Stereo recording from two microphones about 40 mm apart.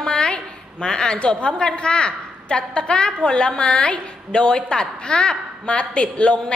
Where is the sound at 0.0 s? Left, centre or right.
Left.